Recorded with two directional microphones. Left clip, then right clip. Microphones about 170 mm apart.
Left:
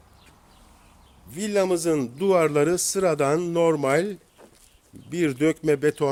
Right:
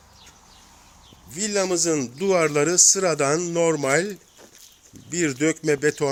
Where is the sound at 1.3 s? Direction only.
15° left (ahead or behind).